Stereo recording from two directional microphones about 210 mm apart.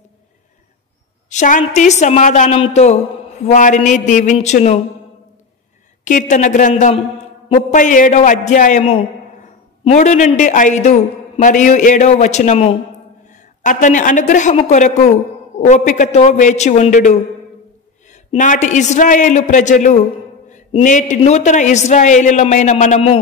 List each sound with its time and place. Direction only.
1.3 s a man's voice: 35° left (ahead or behind)
6.0 s a man's voice: 35° left (ahead or behind)